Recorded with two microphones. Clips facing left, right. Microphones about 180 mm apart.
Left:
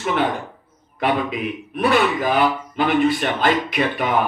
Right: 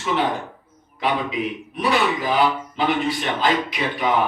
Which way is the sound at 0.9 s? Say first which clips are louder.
Left 2 dB; 55° left (ahead or behind).